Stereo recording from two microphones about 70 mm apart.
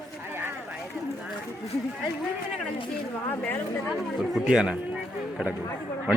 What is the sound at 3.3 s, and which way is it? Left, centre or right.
Speech, left.